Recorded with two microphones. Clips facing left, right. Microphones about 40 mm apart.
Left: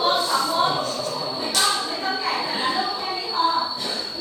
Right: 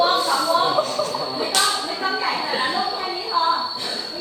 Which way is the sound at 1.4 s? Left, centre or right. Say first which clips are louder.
Right 1 dB; right.